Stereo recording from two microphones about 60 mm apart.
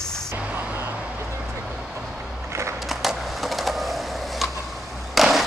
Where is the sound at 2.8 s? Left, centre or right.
Centre.